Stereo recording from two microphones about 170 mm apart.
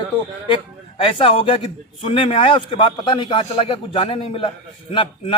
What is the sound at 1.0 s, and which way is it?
A man's voice, 30° left (ahead or behind).